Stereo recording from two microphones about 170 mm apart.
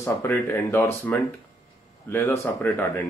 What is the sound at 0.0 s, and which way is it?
Speech, 15° left (ahead or behind).